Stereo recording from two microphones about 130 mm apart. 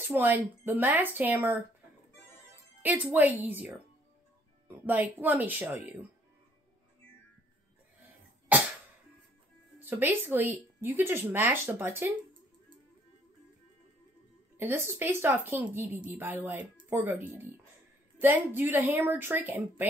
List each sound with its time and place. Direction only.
0.0 s speech: 15° right (ahead or behind)
2.8 s speech: 15° right (ahead or behind)
8.5 s music: 10° right (ahead or behind)
9.8 s speech: 15° right (ahead or behind)
14.6 s speech: 15° right (ahead or behind)